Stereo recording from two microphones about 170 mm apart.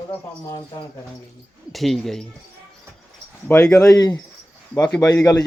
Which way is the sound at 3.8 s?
20° left (ahead or behind).